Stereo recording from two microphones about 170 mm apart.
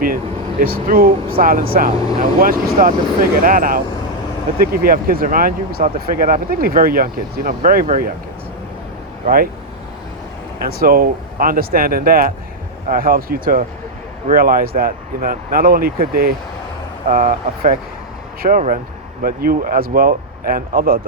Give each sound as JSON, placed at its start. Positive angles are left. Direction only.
{"t": 0.6, "sound": "speech", "side_deg": -60}
{"t": 9.2, "sound": "speech", "side_deg": -60}
{"t": 10.6, "sound": "speech", "side_deg": -60}